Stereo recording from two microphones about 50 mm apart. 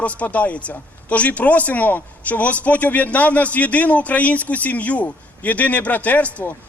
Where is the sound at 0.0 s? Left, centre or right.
Left.